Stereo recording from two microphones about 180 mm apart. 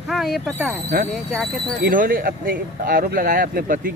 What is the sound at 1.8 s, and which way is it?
Speech, 55° right (ahead or behind).